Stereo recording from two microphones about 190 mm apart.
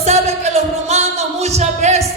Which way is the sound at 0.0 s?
35° right (ahead or behind).